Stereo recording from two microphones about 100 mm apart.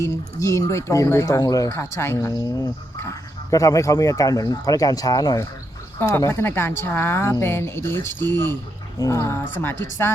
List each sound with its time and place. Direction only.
0.0 s speech: 30° left (ahead or behind)
1.7 s speech: 25° left (ahead or behind)
2.3 s speech: 40° left (ahead or behind)
6.0 s speech: 25° left (ahead or behind)